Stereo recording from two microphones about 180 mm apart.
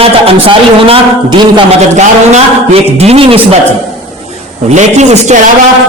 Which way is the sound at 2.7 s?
35° right (ahead or behind).